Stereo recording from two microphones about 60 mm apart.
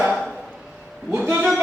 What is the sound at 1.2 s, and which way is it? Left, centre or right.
Speech, right.